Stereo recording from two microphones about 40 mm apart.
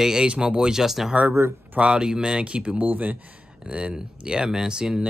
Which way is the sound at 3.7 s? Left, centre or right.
Right.